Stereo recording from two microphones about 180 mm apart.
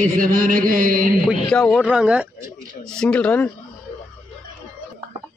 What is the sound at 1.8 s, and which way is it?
Speech, 5° right (ahead or behind).